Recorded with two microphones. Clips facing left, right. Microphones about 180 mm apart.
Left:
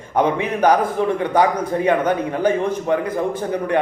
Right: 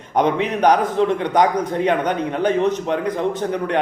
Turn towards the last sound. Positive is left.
turn(degrees=10)  # may be behind; listen again after turning